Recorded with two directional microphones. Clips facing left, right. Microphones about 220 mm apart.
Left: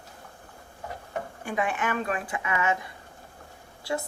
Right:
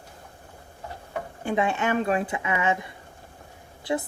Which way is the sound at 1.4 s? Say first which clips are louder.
Right 5 dB; 25° right (ahead or behind).